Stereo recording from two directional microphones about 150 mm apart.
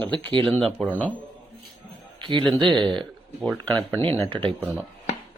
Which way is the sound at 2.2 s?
30° right (ahead or behind).